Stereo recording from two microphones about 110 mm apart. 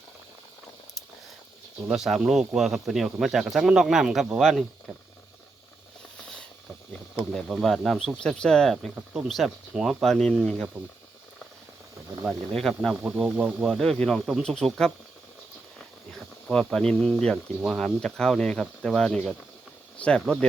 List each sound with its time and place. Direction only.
1.9 s speech: 5° right (ahead or behind)
7.6 s speech: 5° left (ahead or behind)
12.2 s speech: centre (ahead or behind)
13.3 s speech: 15° right (ahead or behind)
13.7 s speech: 5° left (ahead or behind)
16.6 s speech: 5° left (ahead or behind)